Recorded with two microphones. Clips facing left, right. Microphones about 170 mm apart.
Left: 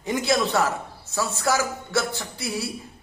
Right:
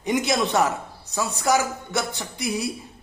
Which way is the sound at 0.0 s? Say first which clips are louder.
Even; 20° right (ahead or behind).